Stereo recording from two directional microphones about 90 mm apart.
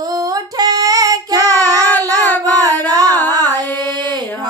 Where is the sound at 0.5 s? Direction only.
45° right (ahead or behind).